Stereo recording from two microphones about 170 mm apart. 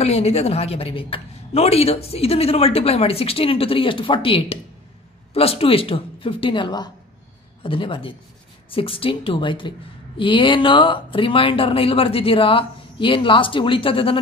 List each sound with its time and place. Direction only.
0.0 s a woman's voice: 40° left (ahead or behind)